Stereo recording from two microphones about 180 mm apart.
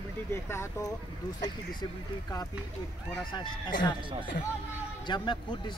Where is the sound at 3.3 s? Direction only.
25° left (ahead or behind).